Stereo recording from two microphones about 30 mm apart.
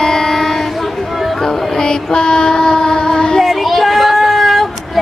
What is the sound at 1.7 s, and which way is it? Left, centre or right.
Child singing, left.